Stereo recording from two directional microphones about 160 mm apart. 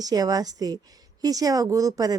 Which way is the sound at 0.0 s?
25° right (ahead or behind).